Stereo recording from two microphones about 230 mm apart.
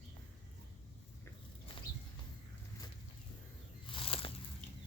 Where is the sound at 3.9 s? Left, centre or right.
Left.